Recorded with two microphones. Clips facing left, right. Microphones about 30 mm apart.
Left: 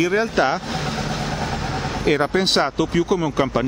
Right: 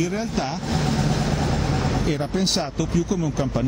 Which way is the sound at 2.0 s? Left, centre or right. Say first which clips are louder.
Left 5 dB; left.